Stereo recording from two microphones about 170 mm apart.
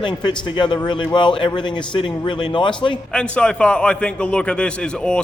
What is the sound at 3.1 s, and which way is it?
A man's voice, 5° left (ahead or behind).